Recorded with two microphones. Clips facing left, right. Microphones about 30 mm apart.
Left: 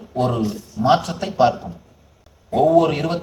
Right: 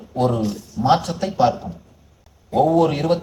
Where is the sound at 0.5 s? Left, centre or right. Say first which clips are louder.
Left 1 dB; left.